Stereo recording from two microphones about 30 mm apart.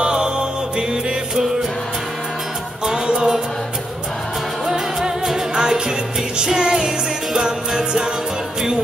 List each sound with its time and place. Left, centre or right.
0.0 s music: right
3.1 s music: right
4.6 s music: centre